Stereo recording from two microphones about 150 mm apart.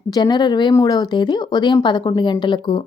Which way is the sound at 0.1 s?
30° left (ahead or behind).